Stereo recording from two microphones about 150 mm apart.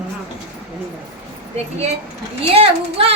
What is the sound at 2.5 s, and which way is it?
Speech, 40° right (ahead or behind).